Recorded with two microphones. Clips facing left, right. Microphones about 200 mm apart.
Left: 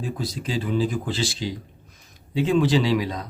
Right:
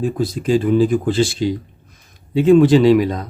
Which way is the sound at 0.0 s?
50° right (ahead or behind).